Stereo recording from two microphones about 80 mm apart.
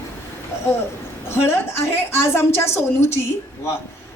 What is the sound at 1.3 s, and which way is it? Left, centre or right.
A woman's voice, left.